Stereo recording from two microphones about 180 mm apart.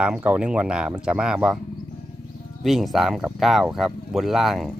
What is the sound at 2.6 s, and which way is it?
Speech, centre (ahead or behind).